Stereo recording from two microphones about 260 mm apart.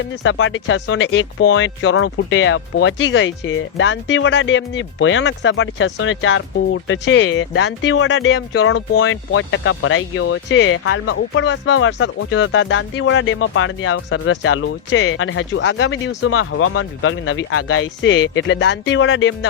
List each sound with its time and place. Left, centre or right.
0.0 s speech: left